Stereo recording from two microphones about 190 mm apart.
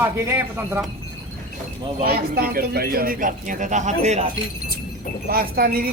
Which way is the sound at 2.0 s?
55° right (ahead or behind).